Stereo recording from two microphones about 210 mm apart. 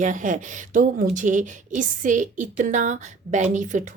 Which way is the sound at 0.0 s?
35° right (ahead or behind).